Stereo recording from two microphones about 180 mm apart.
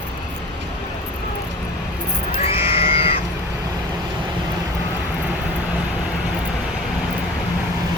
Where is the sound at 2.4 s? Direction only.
30° left (ahead or behind).